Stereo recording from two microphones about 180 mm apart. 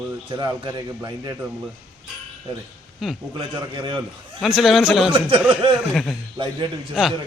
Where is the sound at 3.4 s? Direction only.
25° right (ahead or behind).